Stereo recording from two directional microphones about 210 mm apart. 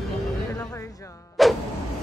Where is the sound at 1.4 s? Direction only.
Centre (ahead or behind).